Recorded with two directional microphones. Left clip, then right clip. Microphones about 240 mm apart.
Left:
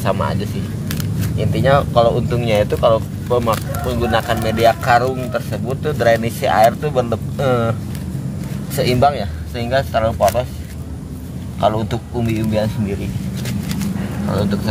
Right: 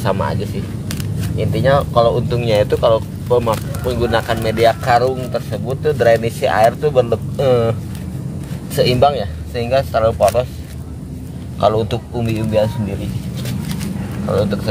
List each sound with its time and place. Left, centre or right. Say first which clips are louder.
0.0 s speech: right 1 dB; centre
5.3 s speech: right 1 dB; centre
5.9 s speech: right 2 dB; centre
8.7 s speech: right 2 dB; centre
11.6 s speech: right 2 dB; right